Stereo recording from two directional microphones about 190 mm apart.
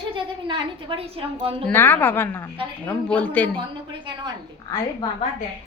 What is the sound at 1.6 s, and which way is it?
Speech, 10° left (ahead or behind).